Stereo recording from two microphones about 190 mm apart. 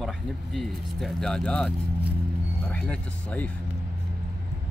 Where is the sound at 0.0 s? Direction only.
Centre (ahead or behind).